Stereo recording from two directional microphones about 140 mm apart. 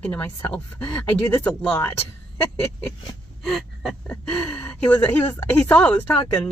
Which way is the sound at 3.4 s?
Centre (ahead or behind).